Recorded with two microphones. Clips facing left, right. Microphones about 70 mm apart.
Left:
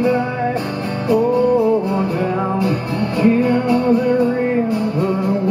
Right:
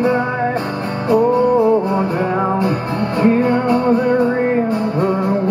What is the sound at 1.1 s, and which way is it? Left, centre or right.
Music, right.